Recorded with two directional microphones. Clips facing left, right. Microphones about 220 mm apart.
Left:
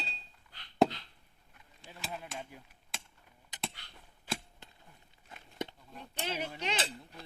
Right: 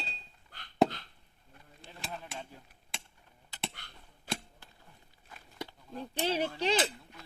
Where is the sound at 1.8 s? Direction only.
10° left (ahead or behind).